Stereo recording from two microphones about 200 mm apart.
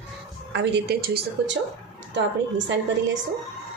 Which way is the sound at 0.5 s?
55° right (ahead or behind).